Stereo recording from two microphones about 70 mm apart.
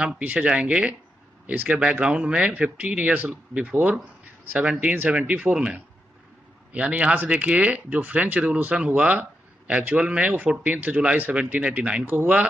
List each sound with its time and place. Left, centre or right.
0.2 s speech: centre